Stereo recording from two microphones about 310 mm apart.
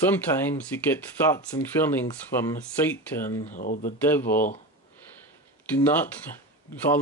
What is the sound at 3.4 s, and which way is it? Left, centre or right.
Speech, left.